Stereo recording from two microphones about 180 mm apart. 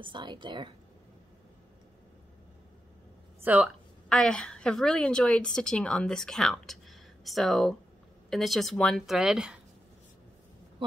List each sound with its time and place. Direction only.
0.0 s speech: 25° right (ahead or behind)
3.4 s a woman's voice: 5° right (ahead or behind)